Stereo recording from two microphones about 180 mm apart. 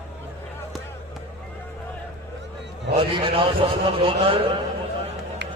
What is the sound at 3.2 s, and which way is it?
A man's voice, 30° right (ahead or behind).